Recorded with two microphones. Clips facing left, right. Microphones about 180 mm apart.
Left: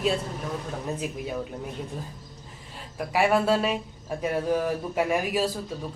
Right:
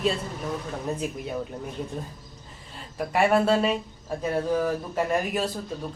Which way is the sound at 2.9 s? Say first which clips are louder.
Right 1 dB; centre (ahead or behind).